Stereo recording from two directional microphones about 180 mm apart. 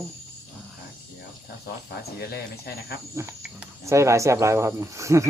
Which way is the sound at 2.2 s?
60° left (ahead or behind).